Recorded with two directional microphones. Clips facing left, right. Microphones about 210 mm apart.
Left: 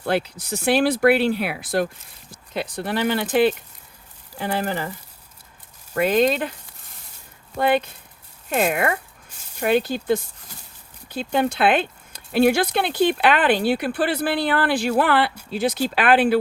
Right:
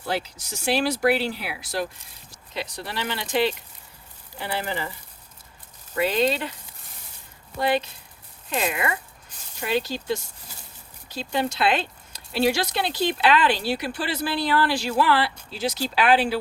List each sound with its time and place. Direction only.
0.0 s speech: 60° left (ahead or behind)
5.9 s speech: 50° left (ahead or behind)
7.6 s speech: 55° left (ahead or behind)